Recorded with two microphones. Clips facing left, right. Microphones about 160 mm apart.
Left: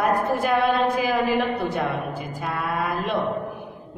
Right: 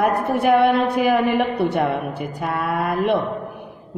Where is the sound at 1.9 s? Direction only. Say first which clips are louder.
Right 4 dB; 65° right (ahead or behind).